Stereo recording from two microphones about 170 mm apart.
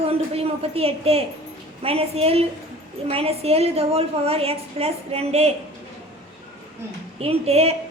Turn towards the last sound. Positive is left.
turn(degrees=-35)  # may be behind; listen again after turning